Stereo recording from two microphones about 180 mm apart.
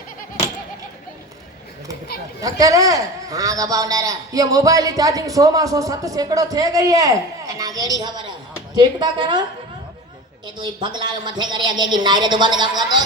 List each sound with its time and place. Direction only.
2.4 s a man's voice: 20° right (ahead or behind)
10.4 s a man's voice: 25° right (ahead or behind)